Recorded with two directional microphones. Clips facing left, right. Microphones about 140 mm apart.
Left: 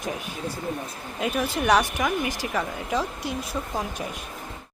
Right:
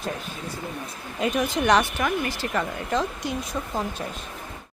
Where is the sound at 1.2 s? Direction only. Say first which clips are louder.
Right 2 dB; 5° left (ahead or behind).